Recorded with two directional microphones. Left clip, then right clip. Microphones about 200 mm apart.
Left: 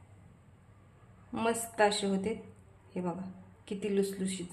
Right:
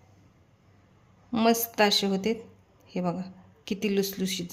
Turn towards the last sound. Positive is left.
turn(degrees=-50)  # may be behind; listen again after turning